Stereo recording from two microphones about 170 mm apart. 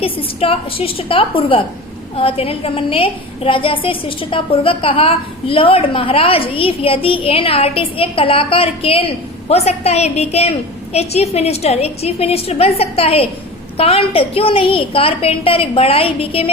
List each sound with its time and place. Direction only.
0.0 s a woman's voice: 35° left (ahead or behind)